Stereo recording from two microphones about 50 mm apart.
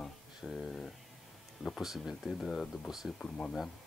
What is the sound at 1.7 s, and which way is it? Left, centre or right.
Speech, centre.